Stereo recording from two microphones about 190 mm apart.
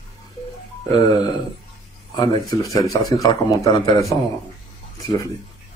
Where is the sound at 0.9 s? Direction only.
20° left (ahead or behind).